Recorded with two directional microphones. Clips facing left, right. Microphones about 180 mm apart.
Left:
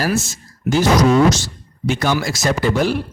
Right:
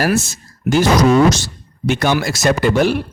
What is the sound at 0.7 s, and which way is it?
Speech, 70° right (ahead or behind).